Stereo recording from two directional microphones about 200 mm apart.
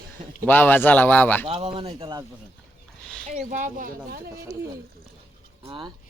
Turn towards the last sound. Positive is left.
turn(degrees=-25)  # may be behind; listen again after turning